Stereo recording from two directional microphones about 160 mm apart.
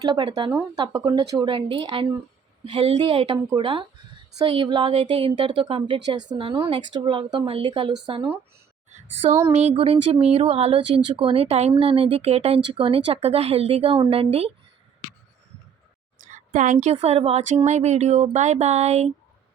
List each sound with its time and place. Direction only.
0.0 s a woman's voice: 30° right (ahead or behind)
9.5 s speech: 40° right (ahead or behind)
16.1 s a sound: 50° right (ahead or behind)
16.8 s speech: 40° right (ahead or behind)